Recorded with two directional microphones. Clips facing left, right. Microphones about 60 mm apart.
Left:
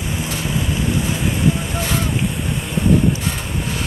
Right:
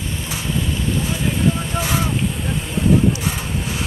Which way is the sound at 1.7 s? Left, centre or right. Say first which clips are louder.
Even; centre.